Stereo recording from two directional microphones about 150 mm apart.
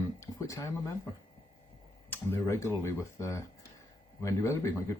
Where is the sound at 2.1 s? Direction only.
15° left (ahead or behind).